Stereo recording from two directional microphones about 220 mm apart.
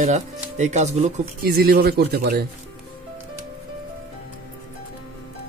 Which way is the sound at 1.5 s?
45° right (ahead or behind).